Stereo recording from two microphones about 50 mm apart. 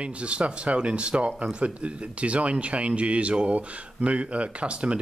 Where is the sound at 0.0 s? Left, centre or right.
Right.